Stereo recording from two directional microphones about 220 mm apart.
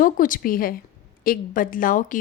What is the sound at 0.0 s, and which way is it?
A woman's voice, 40° left (ahead or behind).